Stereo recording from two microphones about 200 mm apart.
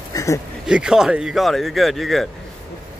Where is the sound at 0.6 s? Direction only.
5° right (ahead or behind).